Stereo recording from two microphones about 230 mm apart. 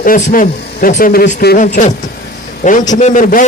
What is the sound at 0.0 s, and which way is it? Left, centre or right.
A man's voice, left.